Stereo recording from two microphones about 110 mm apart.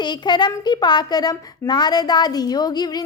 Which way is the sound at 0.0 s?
40° left (ahead or behind).